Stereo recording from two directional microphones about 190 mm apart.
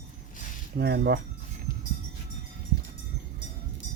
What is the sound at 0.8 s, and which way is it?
Speech, 55° right (ahead or behind).